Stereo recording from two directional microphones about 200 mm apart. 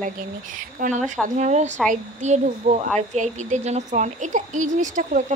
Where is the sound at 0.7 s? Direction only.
40° right (ahead or behind).